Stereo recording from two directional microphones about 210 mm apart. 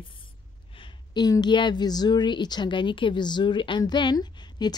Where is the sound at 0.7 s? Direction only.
20° left (ahead or behind).